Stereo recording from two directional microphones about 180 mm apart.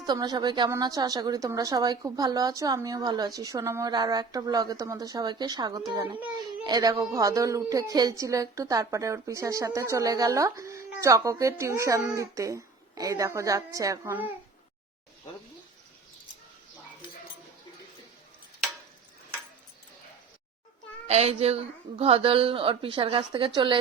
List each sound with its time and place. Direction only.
0.0 s a woman's voice: 20° right (ahead or behind)
21.1 s a woman's voice: 35° right (ahead or behind)